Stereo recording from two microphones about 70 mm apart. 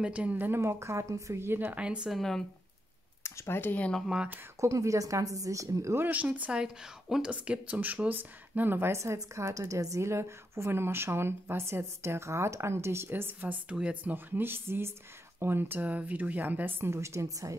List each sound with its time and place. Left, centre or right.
0.0 s speech: centre
0.6 s a woman's voice: right
1.8 s a woman's voice: centre
2.0 s speech: centre
3.3 s speech: left
4.6 s a woman's voice: right
6.0 s a woman's voice: right
14.1 s a woman's voice: right